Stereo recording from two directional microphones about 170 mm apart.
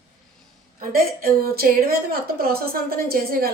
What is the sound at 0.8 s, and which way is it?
A woman's voice, 60° right (ahead or behind).